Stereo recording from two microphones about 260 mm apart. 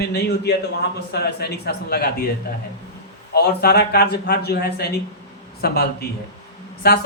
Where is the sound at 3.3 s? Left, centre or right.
Left.